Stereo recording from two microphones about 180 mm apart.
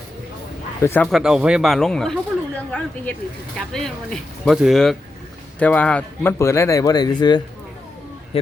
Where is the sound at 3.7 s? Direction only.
5° left (ahead or behind).